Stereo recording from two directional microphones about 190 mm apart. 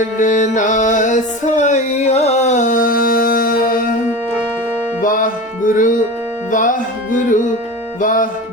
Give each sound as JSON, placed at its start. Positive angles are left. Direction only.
{"t": 0.2, "sound": "music", "side_deg": 40}
{"t": 4.9, "sound": "music", "side_deg": 45}